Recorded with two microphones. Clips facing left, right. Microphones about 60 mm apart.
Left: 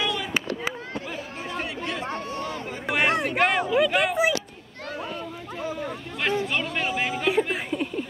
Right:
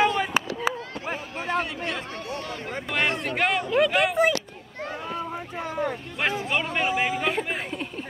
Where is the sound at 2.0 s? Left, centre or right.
Left.